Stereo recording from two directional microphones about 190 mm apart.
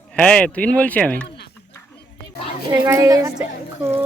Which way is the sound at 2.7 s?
15° right (ahead or behind).